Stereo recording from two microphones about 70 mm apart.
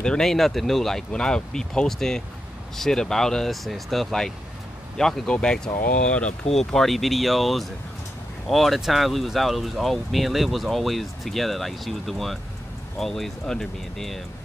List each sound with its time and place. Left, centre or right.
0.0 s speech: centre
6.6 s speech: centre